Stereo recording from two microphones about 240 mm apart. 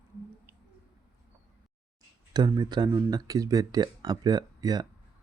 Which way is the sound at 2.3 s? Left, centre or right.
Centre.